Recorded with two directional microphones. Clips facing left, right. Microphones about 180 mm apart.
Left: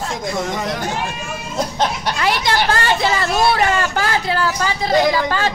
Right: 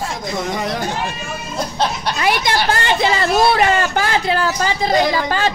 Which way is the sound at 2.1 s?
15° right (ahead or behind).